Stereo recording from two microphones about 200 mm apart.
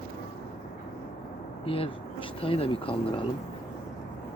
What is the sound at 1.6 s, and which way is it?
Speech, 25° left (ahead or behind).